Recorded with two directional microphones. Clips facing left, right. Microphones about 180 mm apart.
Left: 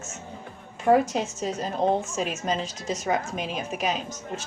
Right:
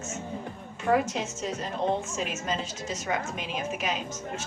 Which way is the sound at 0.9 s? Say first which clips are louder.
Left 5 dB; 35° left (ahead or behind).